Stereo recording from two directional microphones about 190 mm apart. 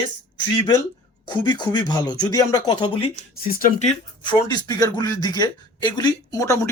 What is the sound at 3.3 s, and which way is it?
Speech, 50° left (ahead or behind).